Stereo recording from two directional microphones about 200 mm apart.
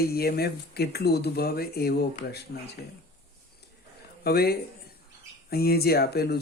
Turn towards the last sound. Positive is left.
turn(degrees=50)  # may be behind; listen again after turning